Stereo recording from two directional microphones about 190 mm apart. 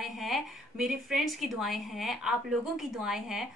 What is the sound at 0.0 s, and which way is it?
A woman's voice, centre (ahead or behind).